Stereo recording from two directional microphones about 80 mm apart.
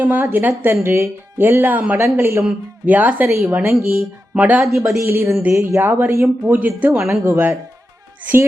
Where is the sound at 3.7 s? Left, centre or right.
Centre.